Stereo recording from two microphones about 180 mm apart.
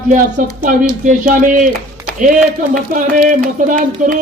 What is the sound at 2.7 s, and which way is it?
A man's voice, 50° right (ahead or behind).